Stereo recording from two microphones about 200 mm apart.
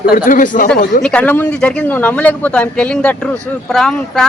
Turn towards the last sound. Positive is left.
turn(degrees=0)  # may be behind; listen again after turning